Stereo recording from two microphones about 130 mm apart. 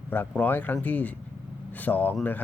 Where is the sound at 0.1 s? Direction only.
15° left (ahead or behind).